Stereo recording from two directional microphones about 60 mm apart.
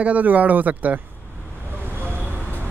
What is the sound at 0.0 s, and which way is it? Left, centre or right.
Speech, right.